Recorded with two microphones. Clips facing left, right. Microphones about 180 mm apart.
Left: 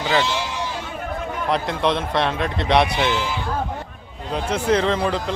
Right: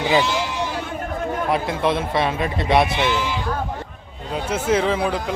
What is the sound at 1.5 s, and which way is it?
A man's voice, 5° right (ahead or behind).